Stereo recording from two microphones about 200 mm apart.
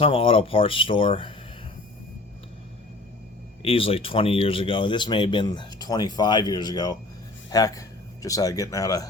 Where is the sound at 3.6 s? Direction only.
30° left (ahead or behind).